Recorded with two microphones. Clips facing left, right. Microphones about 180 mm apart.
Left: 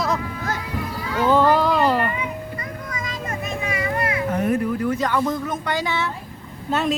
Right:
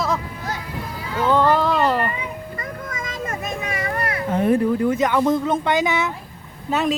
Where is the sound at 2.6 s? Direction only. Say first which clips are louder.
Right 1 dB; 45° right (ahead or behind).